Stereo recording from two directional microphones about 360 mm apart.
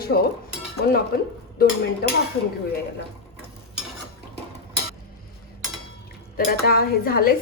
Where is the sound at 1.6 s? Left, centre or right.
Left.